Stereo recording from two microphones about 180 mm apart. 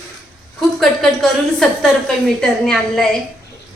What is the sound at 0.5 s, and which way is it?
A woman's voice, centre (ahead or behind).